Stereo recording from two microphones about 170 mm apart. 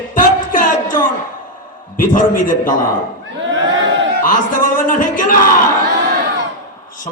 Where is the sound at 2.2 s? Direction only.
50° left (ahead or behind).